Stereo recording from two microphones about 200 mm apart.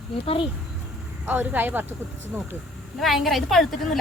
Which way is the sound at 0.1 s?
30° left (ahead or behind).